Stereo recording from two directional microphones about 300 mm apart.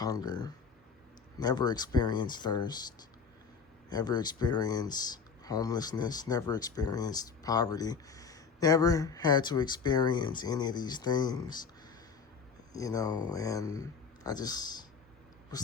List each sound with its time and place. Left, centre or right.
0.0 s speech: centre
12.7 s speech: centre